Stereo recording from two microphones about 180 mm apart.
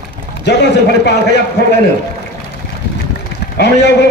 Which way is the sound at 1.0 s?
70° left (ahead or behind).